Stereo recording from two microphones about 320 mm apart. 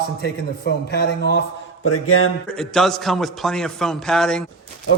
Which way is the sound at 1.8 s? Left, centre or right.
Left.